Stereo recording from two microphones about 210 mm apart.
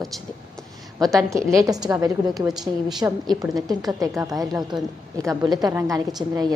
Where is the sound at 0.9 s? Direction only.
15° right (ahead or behind).